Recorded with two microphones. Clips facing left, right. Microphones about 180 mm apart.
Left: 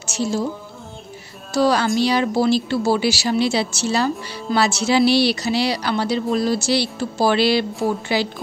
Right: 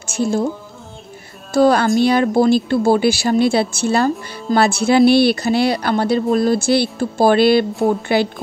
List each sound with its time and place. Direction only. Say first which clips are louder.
0.0 s music: right 4 dB; 55° right (ahead or behind)
1.5 s a woman's voice: right 4 dB; 50° right (ahead or behind)